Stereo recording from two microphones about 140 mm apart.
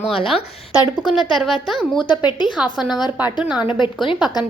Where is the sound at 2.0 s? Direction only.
35° left (ahead or behind).